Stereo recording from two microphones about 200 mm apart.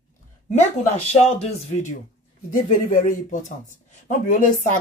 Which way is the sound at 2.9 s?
40° left (ahead or behind).